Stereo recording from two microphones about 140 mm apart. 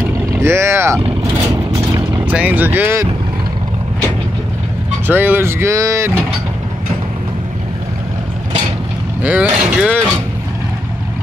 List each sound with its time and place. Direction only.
0.3 s speech: 20° right (ahead or behind)
2.0 s vehicle: 20° right (ahead or behind)
2.3 s speech: 10° right (ahead or behind)
5.0 s speech: 15° right (ahead or behind)
9.2 s speech: 10° right (ahead or behind)